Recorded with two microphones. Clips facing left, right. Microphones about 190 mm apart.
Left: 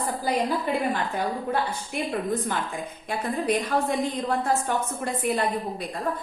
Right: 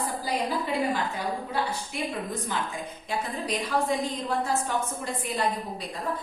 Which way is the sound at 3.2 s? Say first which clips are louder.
Left 7 dB; 55° left (ahead or behind).